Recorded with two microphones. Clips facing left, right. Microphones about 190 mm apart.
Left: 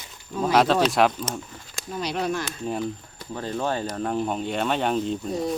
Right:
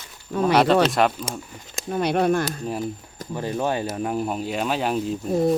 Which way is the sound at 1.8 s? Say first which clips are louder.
Right 7 dB; 55° right (ahead or behind).